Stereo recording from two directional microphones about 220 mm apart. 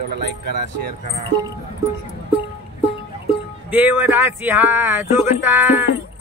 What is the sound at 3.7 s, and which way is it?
Speech, 10° right (ahead or behind).